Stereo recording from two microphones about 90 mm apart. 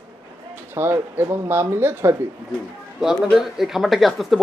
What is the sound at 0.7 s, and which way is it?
Speech, 25° right (ahead or behind).